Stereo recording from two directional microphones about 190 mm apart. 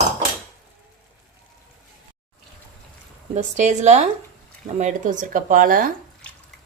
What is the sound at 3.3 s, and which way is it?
Speech, 40° right (ahead or behind).